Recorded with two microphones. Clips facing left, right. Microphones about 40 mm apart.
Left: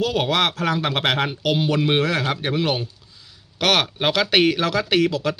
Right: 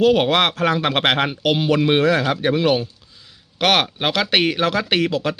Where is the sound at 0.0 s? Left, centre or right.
Right.